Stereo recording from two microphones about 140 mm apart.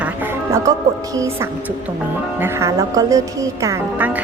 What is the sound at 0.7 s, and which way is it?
Speech, 25° right (ahead or behind).